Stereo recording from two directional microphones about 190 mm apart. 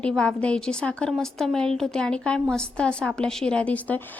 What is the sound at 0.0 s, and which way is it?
A woman's voice, 5° left (ahead or behind).